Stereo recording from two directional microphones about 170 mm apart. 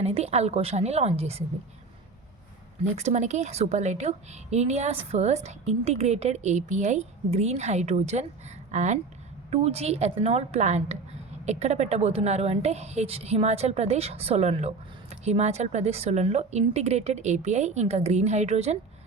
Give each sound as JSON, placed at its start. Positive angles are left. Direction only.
{"t": 0.0, "sound": "a woman's voice", "side_deg": -40}
{"t": 2.8, "sound": "a woman's voice", "side_deg": -40}